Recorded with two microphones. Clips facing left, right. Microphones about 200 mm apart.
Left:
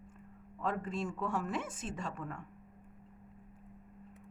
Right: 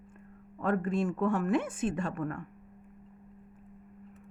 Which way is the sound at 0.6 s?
60° right (ahead or behind).